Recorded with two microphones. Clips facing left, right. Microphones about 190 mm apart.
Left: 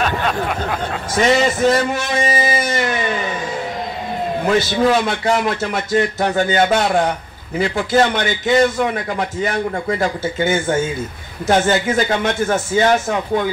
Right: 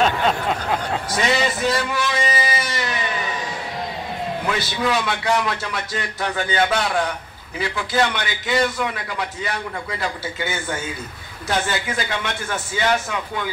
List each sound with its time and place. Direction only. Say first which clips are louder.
1.2 s a man's voice: left 7 dB; 45° left (ahead or behind)
4.5 s a man's voice: left 8 dB; 45° left (ahead or behind)